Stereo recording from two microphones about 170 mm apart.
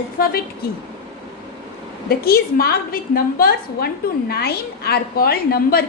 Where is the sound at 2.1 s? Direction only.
65° left (ahead or behind).